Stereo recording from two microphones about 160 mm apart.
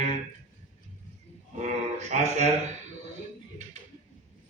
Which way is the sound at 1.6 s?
45° right (ahead or behind).